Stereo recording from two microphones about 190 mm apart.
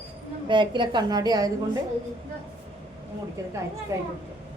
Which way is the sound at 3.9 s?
15° right (ahead or behind).